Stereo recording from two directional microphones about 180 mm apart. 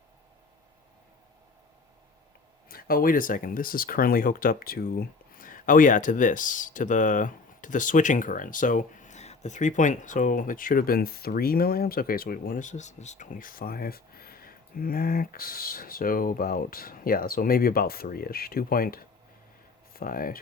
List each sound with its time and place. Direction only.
2.6 s speech: 55° left (ahead or behind)